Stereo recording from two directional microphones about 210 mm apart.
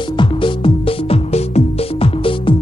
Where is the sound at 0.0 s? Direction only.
25° left (ahead or behind).